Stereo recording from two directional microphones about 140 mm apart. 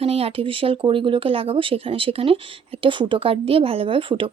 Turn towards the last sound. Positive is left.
turn(degrees=-40)  # may be behind; listen again after turning